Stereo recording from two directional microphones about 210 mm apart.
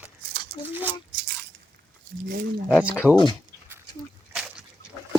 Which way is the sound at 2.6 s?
5° right (ahead or behind).